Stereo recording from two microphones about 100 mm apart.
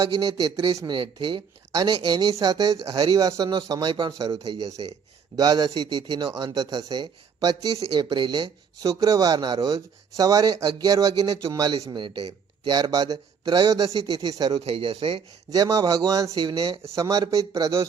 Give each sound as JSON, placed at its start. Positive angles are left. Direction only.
{"t": 0.0, "sound": "a man's voice", "side_deg": -40}
{"t": 8.9, "sound": "a man's voice", "side_deg": -35}
{"t": 14.6, "sound": "speech", "side_deg": -75}
{"t": 15.5, "sound": "a man's voice", "side_deg": -40}